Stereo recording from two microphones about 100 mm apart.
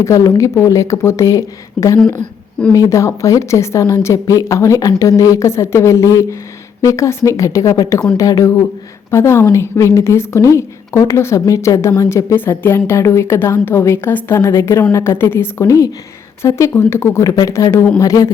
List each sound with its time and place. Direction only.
0.0 s a woman's voice: 30° left (ahead or behind)
2.1 s a woman's voice: 10° left (ahead or behind)
2.7 s a woman's voice: 35° left (ahead or behind)
17.2 s a woman's voice: 40° left (ahead or behind)